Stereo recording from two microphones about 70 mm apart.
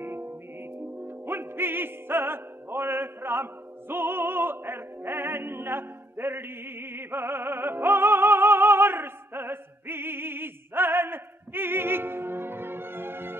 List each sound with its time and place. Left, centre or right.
0.0 s music: right
3.9 s opera: right